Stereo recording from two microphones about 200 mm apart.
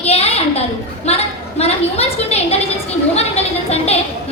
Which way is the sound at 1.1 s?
30° left (ahead or behind).